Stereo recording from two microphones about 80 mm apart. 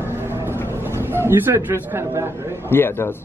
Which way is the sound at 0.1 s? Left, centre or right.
Right.